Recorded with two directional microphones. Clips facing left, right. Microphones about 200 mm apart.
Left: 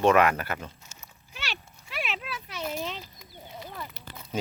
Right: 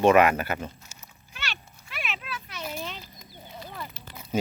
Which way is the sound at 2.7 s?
20° left (ahead or behind).